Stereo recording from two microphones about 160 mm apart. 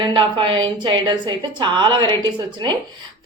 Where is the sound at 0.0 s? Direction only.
30° right (ahead or behind).